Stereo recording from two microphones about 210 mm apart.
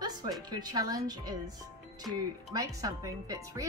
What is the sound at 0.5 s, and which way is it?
Speech, 20° right (ahead or behind).